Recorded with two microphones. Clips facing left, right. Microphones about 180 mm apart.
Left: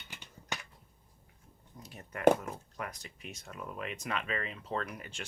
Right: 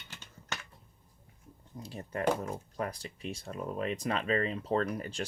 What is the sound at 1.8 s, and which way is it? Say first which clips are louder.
Speech: left 6 dB; 30° right (ahead or behind).